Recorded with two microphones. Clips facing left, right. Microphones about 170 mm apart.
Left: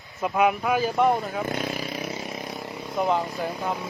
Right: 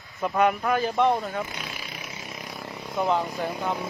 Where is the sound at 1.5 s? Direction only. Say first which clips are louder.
Left 9 dB; 45° left (ahead or behind).